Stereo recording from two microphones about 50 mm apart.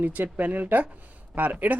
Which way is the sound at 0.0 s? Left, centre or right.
Right.